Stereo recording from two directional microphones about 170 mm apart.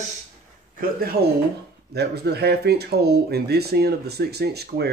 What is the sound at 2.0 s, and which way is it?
Speech, 70° right (ahead or behind).